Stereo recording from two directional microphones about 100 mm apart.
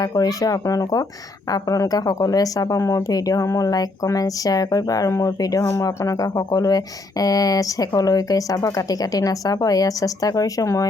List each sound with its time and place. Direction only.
0.0 s speech: 40° left (ahead or behind)